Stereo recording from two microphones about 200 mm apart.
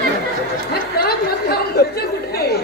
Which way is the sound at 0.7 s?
50° left (ahead or behind).